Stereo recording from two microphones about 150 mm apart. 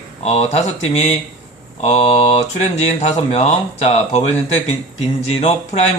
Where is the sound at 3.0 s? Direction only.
50° left (ahead or behind).